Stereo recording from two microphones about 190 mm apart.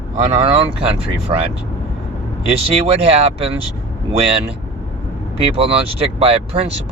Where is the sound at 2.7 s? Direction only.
30° right (ahead or behind).